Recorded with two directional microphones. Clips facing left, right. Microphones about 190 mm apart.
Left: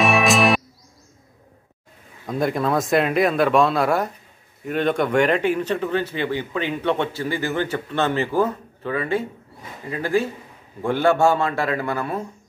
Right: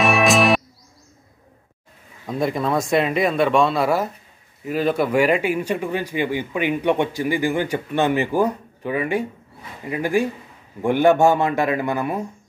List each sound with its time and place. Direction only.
0.0 s music: centre (ahead or behind)
2.2 s speech: centre (ahead or behind); by 12.3 s 15° right (ahead or behind)